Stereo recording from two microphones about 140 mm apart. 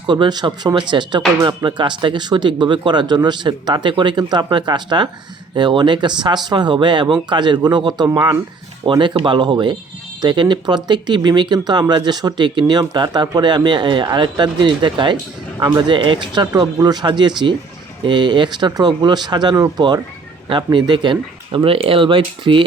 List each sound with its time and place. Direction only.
0.1 s speech: 30° right (ahead or behind)